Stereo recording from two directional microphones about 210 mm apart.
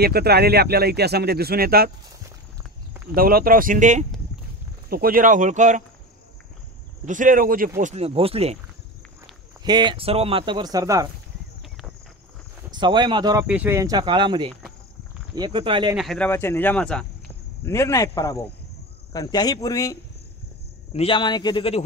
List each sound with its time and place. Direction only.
0.0 s speech: 50° right (ahead or behind)
3.2 s speech: 45° right (ahead or behind)
7.1 s speech: 40° right (ahead or behind)
7.8 s speech: 30° right (ahead or behind)
9.7 s speech: 20° right (ahead or behind)
12.7 s speech: 20° right (ahead or behind)
16.0 s a man's voice: centre (ahead or behind)
16.3 s speech: 10° left (ahead or behind)
20.9 s speech: 25° left (ahead or behind)